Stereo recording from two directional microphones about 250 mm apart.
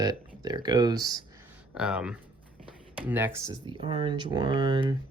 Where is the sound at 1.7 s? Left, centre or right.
Centre.